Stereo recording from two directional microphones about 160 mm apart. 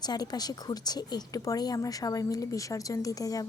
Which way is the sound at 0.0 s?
25° left (ahead or behind).